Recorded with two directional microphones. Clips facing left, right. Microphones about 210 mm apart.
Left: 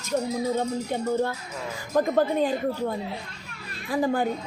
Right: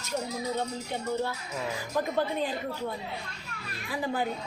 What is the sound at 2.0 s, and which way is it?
Speech, 45° left (ahead or behind).